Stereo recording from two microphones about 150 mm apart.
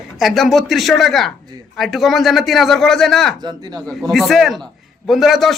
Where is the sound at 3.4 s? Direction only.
25° right (ahead or behind).